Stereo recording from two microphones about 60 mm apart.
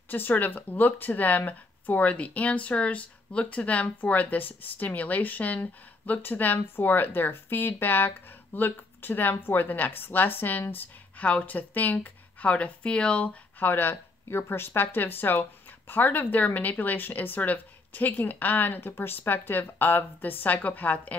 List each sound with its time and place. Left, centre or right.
0.1 s speech: left
13.6 s speech: left